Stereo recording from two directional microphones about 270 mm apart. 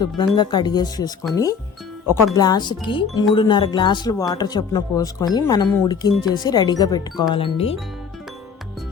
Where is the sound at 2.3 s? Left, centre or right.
Centre.